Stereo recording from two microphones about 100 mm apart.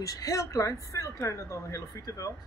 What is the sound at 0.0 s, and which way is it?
Speech, 35° left (ahead or behind).